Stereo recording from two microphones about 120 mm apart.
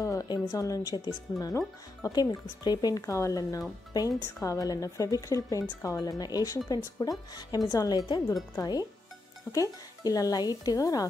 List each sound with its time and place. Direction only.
0.0 s a woman's voice: 25° left (ahead or behind)